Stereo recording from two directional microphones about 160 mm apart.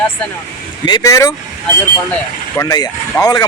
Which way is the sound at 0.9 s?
25° left (ahead or behind).